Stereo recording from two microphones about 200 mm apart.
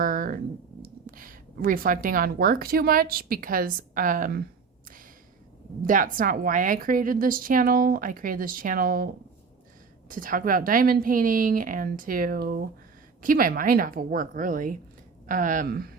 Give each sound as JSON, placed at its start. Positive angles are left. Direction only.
{"t": 0.0, "sound": "a sound", "side_deg": -45}
{"t": 0.8, "sound": "speech", "side_deg": -45}
{"t": 5.8, "sound": "a woman's voice", "side_deg": -40}
{"t": 10.1, "sound": "a woman's voice", "side_deg": -45}